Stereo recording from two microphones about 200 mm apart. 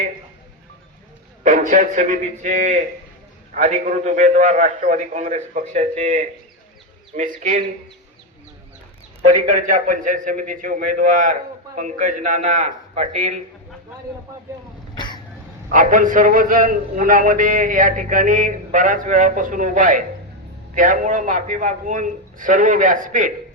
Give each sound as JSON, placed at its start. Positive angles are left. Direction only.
{"t": 1.5, "sound": "a man's voice", "side_deg": -40}
{"t": 9.2, "sound": "a man's voice", "side_deg": -40}
{"t": 14.9, "sound": "throat clearing", "side_deg": 20}
{"t": 15.7, "sound": "a man's voice", "side_deg": -40}